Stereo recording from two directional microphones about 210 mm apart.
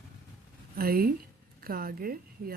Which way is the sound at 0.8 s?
45° right (ahead or behind).